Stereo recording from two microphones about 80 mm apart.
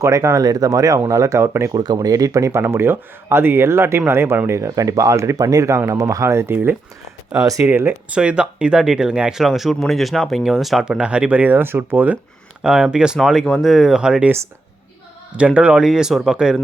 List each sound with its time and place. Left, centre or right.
0.0 s speech: right
1.7 s speech: right
2.0 s speech: right
7.3 s speech: right
7.6 s speech: right
8.1 s speech: centre
10.8 s speech: centre
15.4 s speech: centre